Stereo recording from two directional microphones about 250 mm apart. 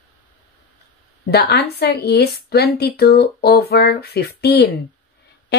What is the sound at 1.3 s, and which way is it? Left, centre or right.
Speech, left.